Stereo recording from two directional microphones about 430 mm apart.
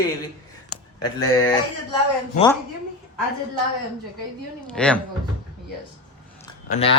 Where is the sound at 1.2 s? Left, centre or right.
Centre.